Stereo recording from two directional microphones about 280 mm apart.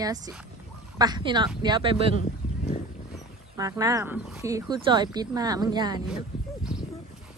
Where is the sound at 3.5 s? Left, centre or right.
Centre.